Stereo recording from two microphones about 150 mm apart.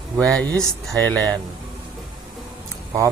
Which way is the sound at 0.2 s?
10° left (ahead or behind).